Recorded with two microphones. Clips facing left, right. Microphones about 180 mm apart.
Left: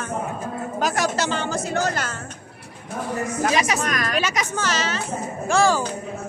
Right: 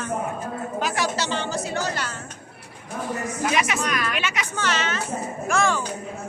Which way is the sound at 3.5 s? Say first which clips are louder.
Right 1 dB; 35° left (ahead or behind).